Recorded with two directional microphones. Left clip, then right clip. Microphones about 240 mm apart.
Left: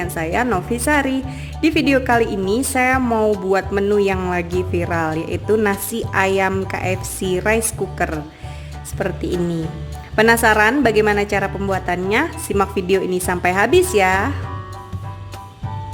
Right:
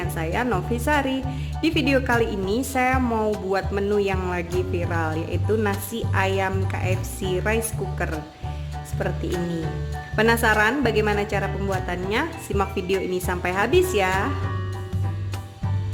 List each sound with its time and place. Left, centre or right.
0.0 s a woman's voice: centre
10.2 s a woman's voice: centre